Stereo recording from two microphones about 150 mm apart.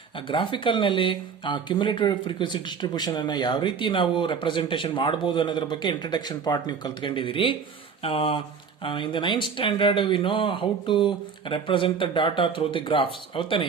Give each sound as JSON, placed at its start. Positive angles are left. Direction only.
{"t": 0.3, "sound": "speech", "side_deg": 35}